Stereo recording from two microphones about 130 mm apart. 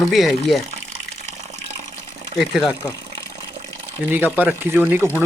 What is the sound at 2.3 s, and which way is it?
Speech, centre (ahead or behind).